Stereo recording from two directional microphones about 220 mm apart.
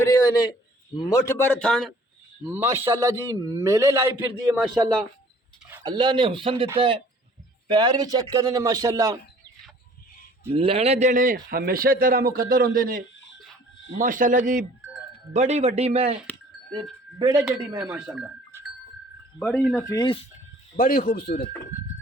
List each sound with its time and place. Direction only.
0.0 s a man's voice: 15° left (ahead or behind)
2.5 s a man's voice: 10° right (ahead or behind)
5.7 s a man's voice: 20° right (ahead or behind)
10.5 s a man's voice: 25° right (ahead or behind); by 13.0 s 40° right (ahead or behind)
14.0 s a man's voice: 40° right (ahead or behind)
17.2 s speech: 20° right (ahead or behind)
17.8 s speech: 5° right (ahead or behind)
19.9 s speech: 20° left (ahead or behind)
20.7 s speech: 40° left (ahead or behind)